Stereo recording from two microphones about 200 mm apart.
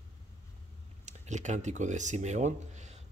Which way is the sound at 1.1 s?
35° right (ahead or behind).